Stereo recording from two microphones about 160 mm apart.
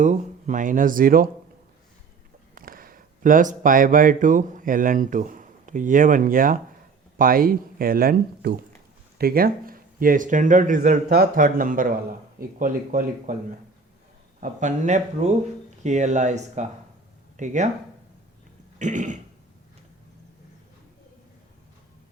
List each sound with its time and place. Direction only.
0.0 s speech: 55° right (ahead or behind)
2.6 s speech: 65° right (ahead or behind)
11.1 s speech: 65° right (ahead or behind)
14.4 s speech: 50° right (ahead or behind)
18.8 s speech: 50° right (ahead or behind)